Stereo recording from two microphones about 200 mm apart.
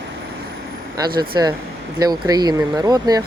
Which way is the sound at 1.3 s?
20° right (ahead or behind).